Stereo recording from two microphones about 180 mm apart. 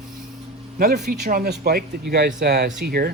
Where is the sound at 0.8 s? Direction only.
60° right (ahead or behind).